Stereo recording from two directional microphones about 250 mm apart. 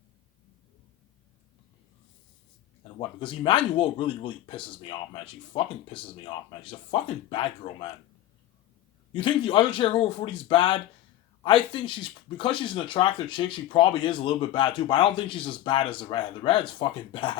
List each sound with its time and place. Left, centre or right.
3.2 s speech: left
9.1 s speech: centre